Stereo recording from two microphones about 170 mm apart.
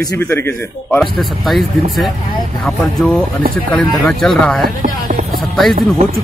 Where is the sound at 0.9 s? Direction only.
Centre (ahead or behind).